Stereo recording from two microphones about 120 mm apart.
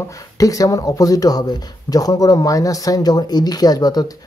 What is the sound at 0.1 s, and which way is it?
Speech, 30° left (ahead or behind).